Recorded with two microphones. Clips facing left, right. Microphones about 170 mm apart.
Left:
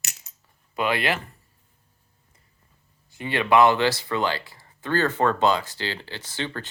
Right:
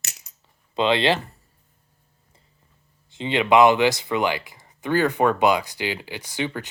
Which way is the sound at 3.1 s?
20° right (ahead or behind).